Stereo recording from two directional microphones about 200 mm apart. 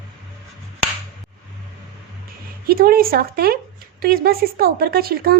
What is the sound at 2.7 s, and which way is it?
Speech, 50° right (ahead or behind).